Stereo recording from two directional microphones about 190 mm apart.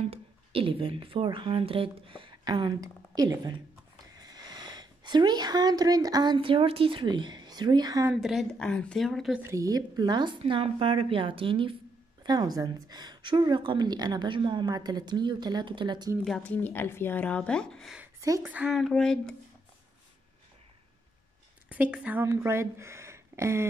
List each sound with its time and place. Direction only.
0.0 s speech: 30° right (ahead or behind)
8.2 s a woman's voice: centre (ahead or behind)
9.4 s a woman's voice: 15° right (ahead or behind)
16.3 s speech: 5° left (ahead or behind)
18.2 s a woman's voice: 15° right (ahead or behind); by 19.3 s 5° left (ahead or behind)
21.6 s a woman's voice: 10° right (ahead or behind)